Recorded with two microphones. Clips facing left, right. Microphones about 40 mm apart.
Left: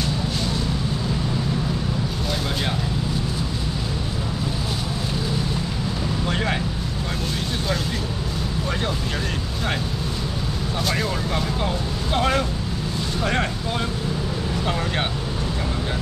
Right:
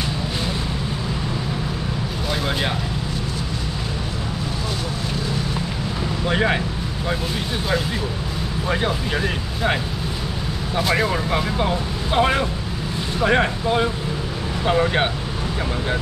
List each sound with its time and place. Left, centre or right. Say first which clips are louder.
6.2 s speech: right 6 dB; centre
10.8 s speech: right 5 dB; centre